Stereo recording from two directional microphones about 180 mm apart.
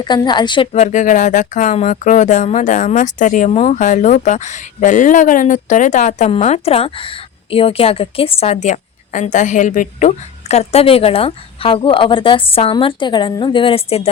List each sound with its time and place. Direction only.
0.0 s a woman's voice: 25° left (ahead or behind)
0.7 s speech: 40° left (ahead or behind)